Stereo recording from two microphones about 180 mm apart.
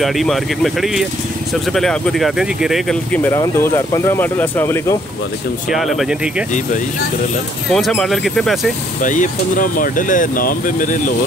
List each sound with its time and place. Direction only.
0.0 s speech: centre (ahead or behind)
3.3 s speech: 15° left (ahead or behind)
5.7 s speech: centre (ahead or behind)
7.7 s speech: 5° left (ahead or behind)
9.0 s speech: 45° left (ahead or behind)